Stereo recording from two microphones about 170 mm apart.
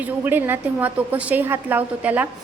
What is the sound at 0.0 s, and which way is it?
A woman's voice, 10° right (ahead or behind).